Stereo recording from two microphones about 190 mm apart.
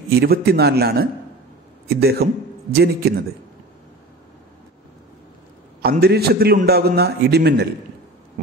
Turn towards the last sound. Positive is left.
turn(degrees=-60)  # may be behind; listen again after turning